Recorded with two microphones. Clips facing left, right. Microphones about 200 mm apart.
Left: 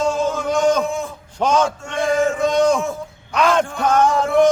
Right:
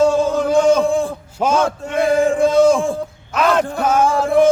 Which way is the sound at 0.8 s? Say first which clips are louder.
Right 5 dB; 30° right (ahead or behind).